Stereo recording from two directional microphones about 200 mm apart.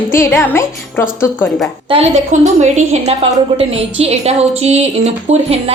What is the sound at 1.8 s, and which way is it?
A woman's voice, 30° right (ahead or behind).